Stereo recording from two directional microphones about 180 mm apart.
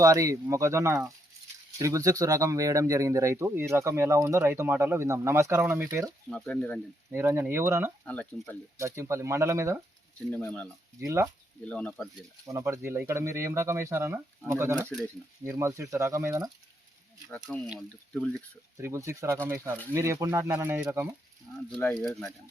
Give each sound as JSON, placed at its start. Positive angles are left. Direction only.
{"t": 0.0, "sound": "speech", "side_deg": -20}
{"t": 6.3, "sound": "speech", "side_deg": 5}
{"t": 7.1, "sound": "speech", "side_deg": -10}
{"t": 8.0, "sound": "speech", "side_deg": 5}
{"t": 8.8, "sound": "speech", "side_deg": -15}
{"t": 10.3, "sound": "speech", "side_deg": 5}
{"t": 11.0, "sound": "speech", "side_deg": -15}
{"t": 11.6, "sound": "speech", "side_deg": 5}
{"t": 12.5, "sound": "speech", "side_deg": -15}
{"t": 17.3, "sound": "speech", "side_deg": 5}
{"t": 18.8, "sound": "speech", "side_deg": -15}
{"t": 21.8, "sound": "speech", "side_deg": 5}